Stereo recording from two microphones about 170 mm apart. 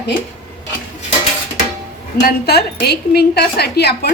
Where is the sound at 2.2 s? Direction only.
70° left (ahead or behind).